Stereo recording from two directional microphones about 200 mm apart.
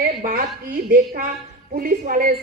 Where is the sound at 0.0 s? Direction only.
45° right (ahead or behind).